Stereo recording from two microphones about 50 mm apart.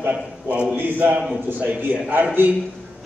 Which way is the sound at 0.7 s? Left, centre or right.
Right.